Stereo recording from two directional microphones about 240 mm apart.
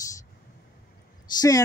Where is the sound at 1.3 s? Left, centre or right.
Centre.